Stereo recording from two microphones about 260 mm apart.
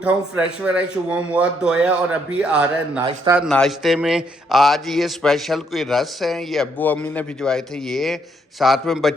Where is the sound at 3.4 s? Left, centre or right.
Centre.